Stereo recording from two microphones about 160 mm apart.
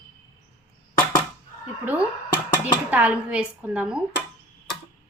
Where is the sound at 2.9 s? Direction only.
10° right (ahead or behind).